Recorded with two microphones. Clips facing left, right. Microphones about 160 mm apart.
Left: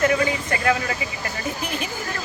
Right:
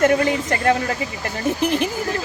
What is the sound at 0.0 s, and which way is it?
Speech, 45° right (ahead or behind).